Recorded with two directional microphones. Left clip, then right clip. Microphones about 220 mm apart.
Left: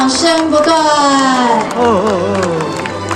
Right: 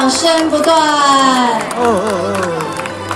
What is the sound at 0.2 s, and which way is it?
Music, 15° left (ahead or behind).